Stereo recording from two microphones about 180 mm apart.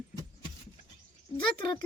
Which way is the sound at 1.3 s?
30° left (ahead or behind).